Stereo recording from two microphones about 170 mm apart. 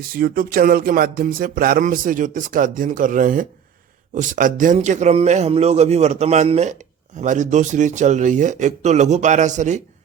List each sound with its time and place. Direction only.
0.1 s a man's voice: 60° right (ahead or behind); by 9.8 s 45° right (ahead or behind)